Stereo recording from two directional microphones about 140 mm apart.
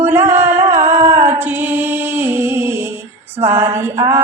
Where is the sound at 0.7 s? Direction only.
55° right (ahead or behind).